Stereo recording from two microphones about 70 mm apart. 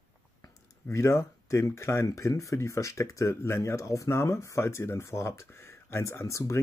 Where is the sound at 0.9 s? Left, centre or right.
Left.